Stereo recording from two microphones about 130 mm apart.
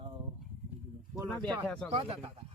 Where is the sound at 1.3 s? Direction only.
10° left (ahead or behind).